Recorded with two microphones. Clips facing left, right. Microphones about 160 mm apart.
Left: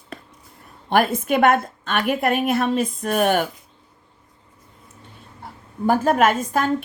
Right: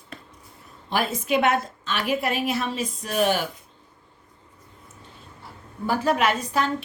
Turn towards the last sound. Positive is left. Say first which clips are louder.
# left 4 dB
turn(degrees=50)  # may be behind; listen again after turning